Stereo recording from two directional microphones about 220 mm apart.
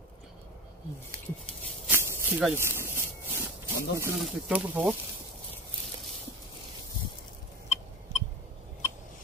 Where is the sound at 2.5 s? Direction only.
10° right (ahead or behind).